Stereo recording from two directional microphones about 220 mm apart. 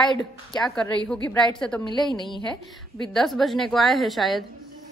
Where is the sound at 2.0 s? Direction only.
20° left (ahead or behind).